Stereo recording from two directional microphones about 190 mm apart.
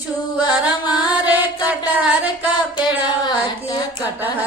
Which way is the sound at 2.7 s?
25° left (ahead or behind).